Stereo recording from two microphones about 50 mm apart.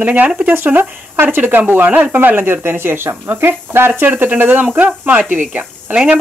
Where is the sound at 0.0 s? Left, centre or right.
Right.